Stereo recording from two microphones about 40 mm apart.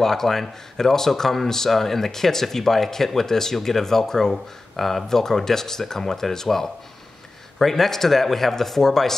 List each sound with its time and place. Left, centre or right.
0.0 s speech: centre